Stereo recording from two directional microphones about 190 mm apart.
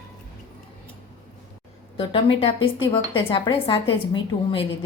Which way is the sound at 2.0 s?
30° left (ahead or behind).